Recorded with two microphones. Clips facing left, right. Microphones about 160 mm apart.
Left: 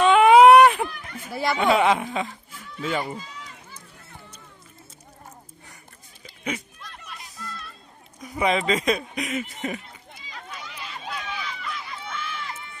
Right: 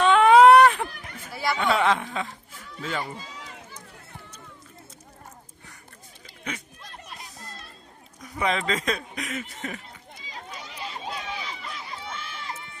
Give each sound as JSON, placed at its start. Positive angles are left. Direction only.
{"t": 0.0, "sound": "baby cry", "side_deg": 10}
{"t": 1.5, "sound": "speech", "side_deg": 15}
{"t": 6.2, "sound": "a sound", "side_deg": 15}
{"t": 6.8, "sound": "a sound", "side_deg": -35}
{"t": 8.2, "sound": "speech", "side_deg": 10}
{"t": 10.3, "sound": "run", "side_deg": -30}